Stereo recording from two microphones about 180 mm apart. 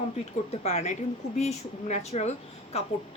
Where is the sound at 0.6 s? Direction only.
40° left (ahead or behind).